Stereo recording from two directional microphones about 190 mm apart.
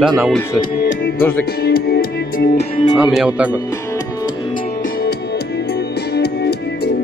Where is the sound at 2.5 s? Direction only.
25° left (ahead or behind).